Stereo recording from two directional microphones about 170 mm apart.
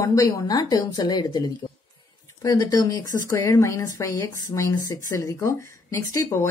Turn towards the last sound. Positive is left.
turn(degrees=15)  # may be behind; listen again after turning